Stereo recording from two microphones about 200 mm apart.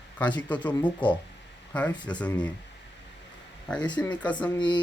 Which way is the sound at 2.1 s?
5° left (ahead or behind).